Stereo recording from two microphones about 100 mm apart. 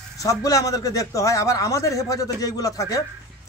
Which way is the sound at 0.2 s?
35° left (ahead or behind).